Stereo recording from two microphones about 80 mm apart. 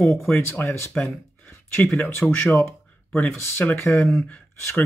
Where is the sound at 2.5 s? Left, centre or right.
Left.